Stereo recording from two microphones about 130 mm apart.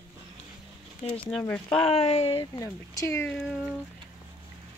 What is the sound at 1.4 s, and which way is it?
Speech, 10° left (ahead or behind).